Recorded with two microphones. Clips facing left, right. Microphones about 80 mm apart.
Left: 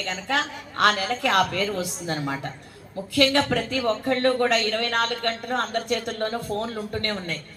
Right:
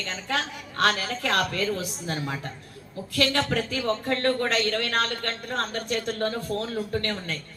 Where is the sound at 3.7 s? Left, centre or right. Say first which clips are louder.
Left 3 dB; left.